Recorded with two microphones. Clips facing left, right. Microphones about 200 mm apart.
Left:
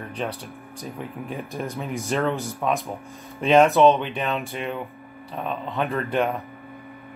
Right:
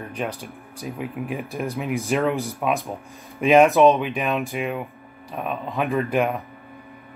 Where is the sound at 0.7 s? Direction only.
10° right (ahead or behind).